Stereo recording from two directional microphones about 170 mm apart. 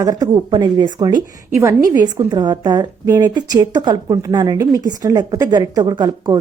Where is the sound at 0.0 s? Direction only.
25° right (ahead or behind).